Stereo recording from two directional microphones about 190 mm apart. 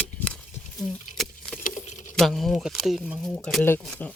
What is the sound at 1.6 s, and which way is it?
Keys jangling, 40° left (ahead or behind).